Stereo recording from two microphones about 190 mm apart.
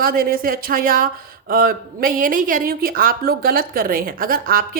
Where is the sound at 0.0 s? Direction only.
50° right (ahead or behind).